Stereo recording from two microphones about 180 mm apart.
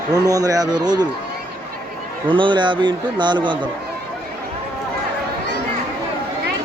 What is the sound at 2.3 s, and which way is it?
A man's voice, 25° right (ahead or behind).